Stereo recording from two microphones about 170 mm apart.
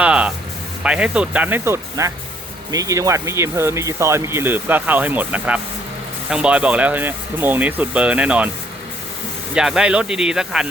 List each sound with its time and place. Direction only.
0.0 s music: 5° right (ahead or behind)
0.8 s speech: 5° right (ahead or behind)
9.6 s speech: 5° right (ahead or behind)